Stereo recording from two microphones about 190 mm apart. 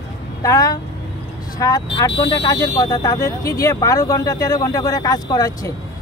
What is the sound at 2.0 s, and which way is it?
Speech, 20° left (ahead or behind).